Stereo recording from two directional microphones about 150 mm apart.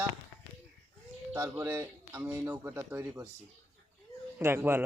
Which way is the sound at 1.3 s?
15° right (ahead or behind).